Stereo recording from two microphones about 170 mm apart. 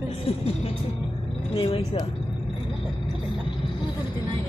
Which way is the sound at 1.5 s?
35° left (ahead or behind).